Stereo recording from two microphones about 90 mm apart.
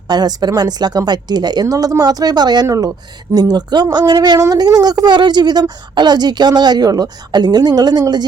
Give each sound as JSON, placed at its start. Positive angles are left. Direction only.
{"t": 0.1, "sound": "speech", "side_deg": -50}
{"t": 2.6, "sound": "speech", "side_deg": -40}
{"t": 3.3, "sound": "speech", "side_deg": -50}